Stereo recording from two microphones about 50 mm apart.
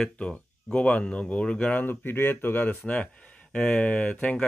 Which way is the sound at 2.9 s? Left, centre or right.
Left.